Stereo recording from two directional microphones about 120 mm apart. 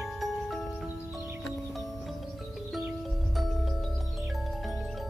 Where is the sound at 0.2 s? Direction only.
Centre (ahead or behind).